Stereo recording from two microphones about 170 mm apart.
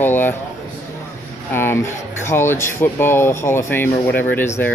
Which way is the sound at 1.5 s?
15° left (ahead or behind).